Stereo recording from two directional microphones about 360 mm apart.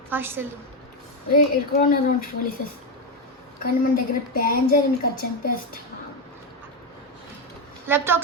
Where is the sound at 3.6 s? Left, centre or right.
Left.